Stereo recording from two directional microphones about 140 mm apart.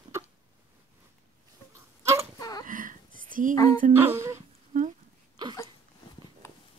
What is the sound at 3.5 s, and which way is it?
Music, 25° left (ahead or behind).